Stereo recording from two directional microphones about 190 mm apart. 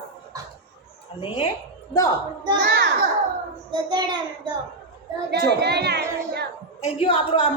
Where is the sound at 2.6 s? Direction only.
65° right (ahead or behind).